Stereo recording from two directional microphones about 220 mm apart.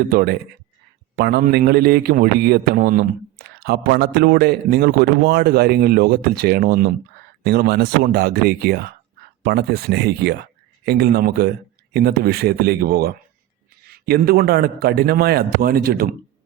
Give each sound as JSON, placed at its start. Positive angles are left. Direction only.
{"t": 0.0, "sound": "a man's voice", "side_deg": -45}